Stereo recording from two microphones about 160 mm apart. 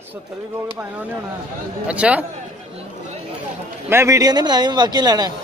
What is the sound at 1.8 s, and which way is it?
Speech, 10° right (ahead or behind).